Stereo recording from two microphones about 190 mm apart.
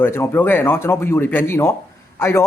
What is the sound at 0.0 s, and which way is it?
Speech, 10° left (ahead or behind).